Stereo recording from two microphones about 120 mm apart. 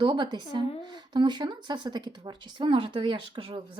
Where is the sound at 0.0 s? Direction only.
40° right (ahead or behind).